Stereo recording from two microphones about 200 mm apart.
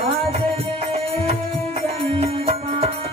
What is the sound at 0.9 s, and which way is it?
Music, 30° right (ahead or behind).